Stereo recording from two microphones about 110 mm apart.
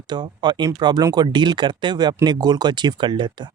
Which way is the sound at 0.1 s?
45° right (ahead or behind).